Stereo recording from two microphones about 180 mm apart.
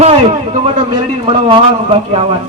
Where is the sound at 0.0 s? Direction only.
35° right (ahead or behind).